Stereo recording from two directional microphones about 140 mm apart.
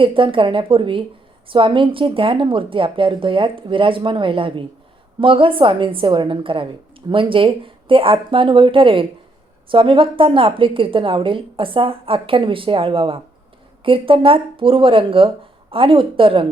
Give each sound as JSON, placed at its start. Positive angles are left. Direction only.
{"t": 0.0, "sound": "speech", "side_deg": -40}